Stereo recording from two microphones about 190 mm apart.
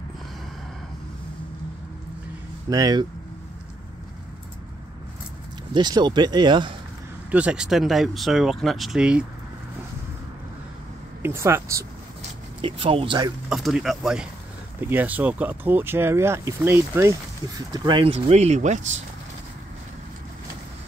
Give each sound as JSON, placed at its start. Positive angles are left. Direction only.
{"t": 2.7, "sound": "speech", "side_deg": -20}
{"t": 5.7, "sound": "speech", "side_deg": -20}
{"t": 7.2, "sound": "speech", "side_deg": -5}
{"t": 11.2, "sound": "speech", "side_deg": -15}
{"t": 12.6, "sound": "speech", "side_deg": -30}
{"t": 13.5, "sound": "speech", "side_deg": 0}
{"t": 17.7, "sound": "speech", "side_deg": -25}